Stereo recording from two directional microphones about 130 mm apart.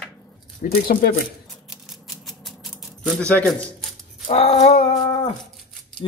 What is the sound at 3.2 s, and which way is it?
Speech, 10° left (ahead or behind).